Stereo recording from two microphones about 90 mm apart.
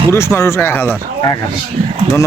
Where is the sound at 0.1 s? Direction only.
30° left (ahead or behind).